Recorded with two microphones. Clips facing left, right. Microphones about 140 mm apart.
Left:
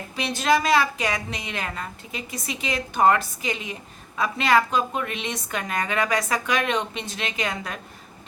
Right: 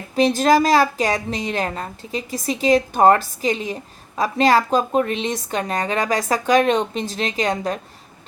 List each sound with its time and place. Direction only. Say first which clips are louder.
0.2 s speech: right 7 dB; 40° right (ahead or behind)